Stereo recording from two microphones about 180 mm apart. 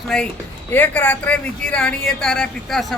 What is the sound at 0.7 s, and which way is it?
Speech, 10° left (ahead or behind).